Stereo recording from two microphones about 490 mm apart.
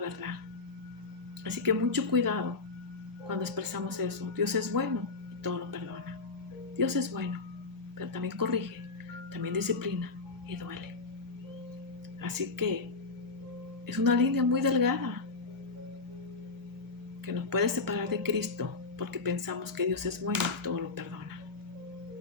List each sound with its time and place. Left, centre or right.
0.0 s music: right
1.5 s speech: right
12.2 s speech: right
13.8 s speech: right
17.2 s speech: right